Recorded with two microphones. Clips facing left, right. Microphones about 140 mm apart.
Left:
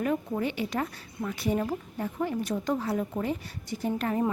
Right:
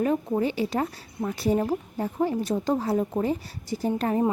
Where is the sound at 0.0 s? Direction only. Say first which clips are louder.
Right 4 dB; 30° right (ahead or behind).